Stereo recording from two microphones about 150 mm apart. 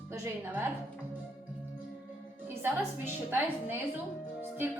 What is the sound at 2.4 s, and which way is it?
A woman's voice, 15° right (ahead or behind).